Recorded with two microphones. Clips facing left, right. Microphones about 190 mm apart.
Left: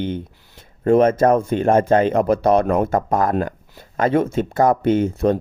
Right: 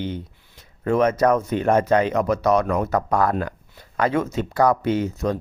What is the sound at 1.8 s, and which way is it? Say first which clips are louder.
Speech: left 3 dB; 45° left (ahead or behind).